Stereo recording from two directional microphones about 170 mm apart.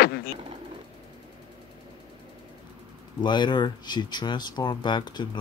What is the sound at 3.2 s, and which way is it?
Speech, 25° left (ahead or behind).